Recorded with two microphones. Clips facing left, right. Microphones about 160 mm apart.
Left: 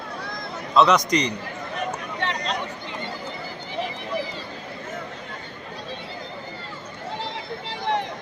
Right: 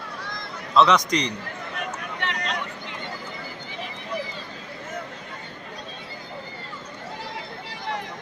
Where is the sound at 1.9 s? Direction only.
35° left (ahead or behind).